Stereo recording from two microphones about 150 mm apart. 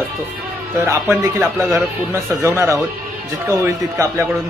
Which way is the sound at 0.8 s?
10° right (ahead or behind).